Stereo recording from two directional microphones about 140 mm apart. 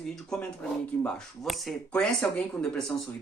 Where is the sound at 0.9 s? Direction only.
15° left (ahead or behind).